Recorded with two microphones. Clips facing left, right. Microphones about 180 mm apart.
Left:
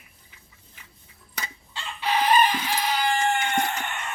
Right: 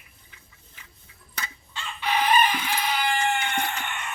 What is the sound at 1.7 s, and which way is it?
Chicken, 35° left (ahead or behind).